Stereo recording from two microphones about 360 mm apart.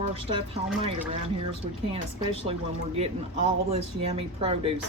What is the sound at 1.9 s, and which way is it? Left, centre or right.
Speech, centre.